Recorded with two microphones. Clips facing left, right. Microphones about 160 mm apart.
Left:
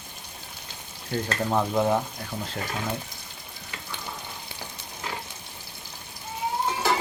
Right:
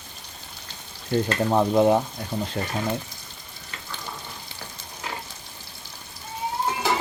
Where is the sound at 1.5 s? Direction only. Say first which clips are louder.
Right 5 dB; 20° right (ahead or behind).